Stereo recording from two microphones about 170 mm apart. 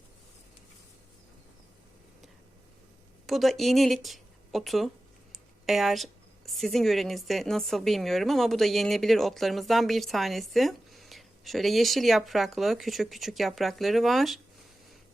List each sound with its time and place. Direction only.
3.2 s a woman's voice: centre (ahead or behind)